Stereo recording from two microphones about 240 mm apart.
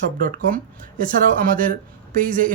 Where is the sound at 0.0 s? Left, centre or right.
Right.